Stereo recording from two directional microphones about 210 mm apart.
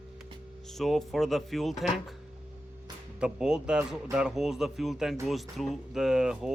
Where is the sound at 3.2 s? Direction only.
5° right (ahead or behind).